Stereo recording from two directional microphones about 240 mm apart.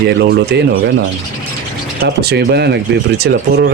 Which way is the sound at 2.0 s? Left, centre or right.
Right.